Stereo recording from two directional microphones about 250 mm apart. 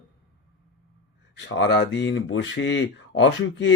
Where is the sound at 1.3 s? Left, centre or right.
Left.